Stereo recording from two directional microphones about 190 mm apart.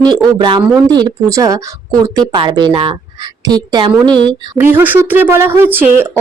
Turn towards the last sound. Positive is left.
turn(degrees=-10)  # may be behind; listen again after turning